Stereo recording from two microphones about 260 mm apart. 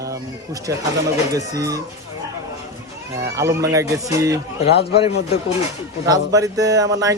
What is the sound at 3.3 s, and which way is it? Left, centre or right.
A man's voice, centre.